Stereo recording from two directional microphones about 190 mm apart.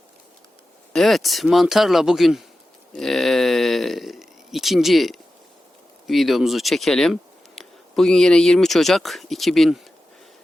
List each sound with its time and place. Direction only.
0.9 s speech: centre (ahead or behind)
2.9 s a sound: centre (ahead or behind)
6.1 s speech: centre (ahead or behind)